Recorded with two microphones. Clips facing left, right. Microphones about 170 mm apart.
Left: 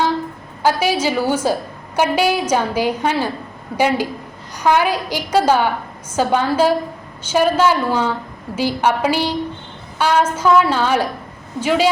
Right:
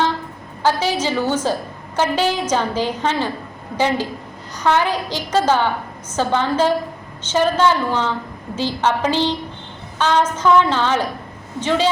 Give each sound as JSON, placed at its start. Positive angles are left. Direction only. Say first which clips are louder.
{"t": 0.6, "sound": "a woman's voice", "louder": "left 2 dB", "side_deg": 10}